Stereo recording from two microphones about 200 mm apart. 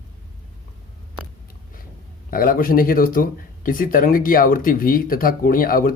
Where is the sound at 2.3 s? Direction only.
45° left (ahead or behind).